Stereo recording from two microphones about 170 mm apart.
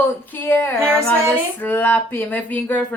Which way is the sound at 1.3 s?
10° left (ahead or behind).